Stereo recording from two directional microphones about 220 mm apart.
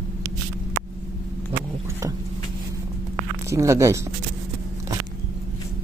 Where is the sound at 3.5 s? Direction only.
15° right (ahead or behind).